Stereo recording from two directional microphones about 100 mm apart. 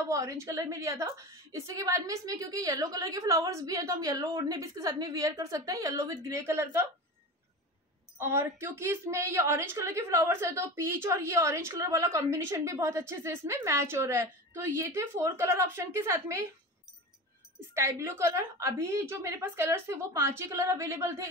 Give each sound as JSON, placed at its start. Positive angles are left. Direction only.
{"t": 0.1, "sound": "a woman's voice", "side_deg": -30}
{"t": 8.2, "sound": "a woman's voice", "side_deg": -25}
{"t": 17.7, "sound": "a woman's voice", "side_deg": -30}